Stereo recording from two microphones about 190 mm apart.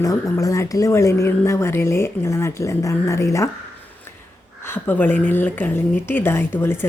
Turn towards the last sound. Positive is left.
turn(degrees=10)  # may be behind; listen again after turning